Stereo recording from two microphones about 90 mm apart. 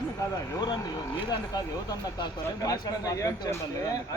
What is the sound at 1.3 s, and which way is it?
Speech, 50° left (ahead or behind).